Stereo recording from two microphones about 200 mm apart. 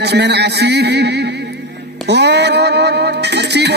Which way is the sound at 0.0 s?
55° right (ahead or behind).